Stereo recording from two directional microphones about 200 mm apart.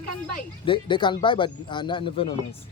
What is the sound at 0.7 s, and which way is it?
Speech, 25° left (ahead or behind).